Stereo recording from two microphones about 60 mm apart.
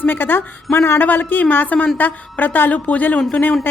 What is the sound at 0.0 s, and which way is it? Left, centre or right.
A woman's voice, left.